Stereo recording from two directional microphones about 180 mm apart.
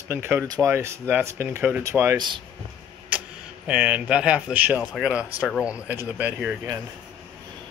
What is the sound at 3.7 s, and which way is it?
Speech, 5° right (ahead or behind).